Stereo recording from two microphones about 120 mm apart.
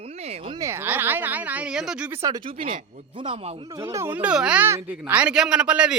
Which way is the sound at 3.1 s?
50° right (ahead or behind).